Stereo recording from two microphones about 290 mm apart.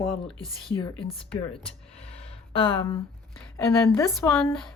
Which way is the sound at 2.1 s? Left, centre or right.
Centre.